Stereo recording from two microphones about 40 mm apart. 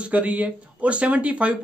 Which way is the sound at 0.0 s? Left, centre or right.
Right.